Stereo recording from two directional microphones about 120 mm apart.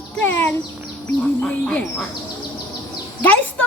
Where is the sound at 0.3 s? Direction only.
20° left (ahead or behind).